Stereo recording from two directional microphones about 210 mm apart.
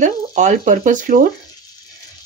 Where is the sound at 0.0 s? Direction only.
35° right (ahead or behind).